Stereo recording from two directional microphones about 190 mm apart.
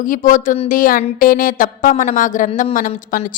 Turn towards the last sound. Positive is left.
turn(degrees=45)  # may be behind; listen again after turning